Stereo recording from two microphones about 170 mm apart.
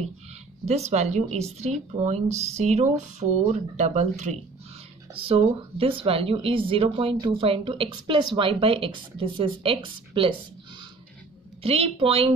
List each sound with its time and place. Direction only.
0.7 s speech: 40° right (ahead or behind)
11.6 s speech: 35° right (ahead or behind)